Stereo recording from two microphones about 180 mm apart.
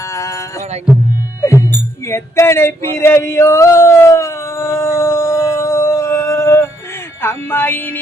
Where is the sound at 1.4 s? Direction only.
15° left (ahead or behind).